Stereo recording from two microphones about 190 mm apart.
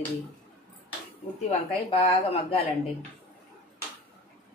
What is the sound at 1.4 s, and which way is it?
Speech, 30° left (ahead or behind).